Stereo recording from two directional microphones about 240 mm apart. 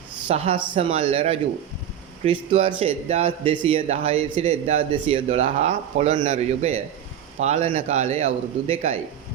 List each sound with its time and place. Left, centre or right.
0.3 s a man's voice: right